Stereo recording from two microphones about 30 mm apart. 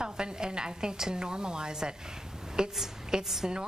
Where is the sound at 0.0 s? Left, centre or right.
Right.